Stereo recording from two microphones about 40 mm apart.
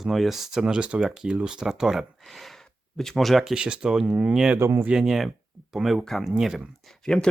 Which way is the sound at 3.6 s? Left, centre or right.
Right.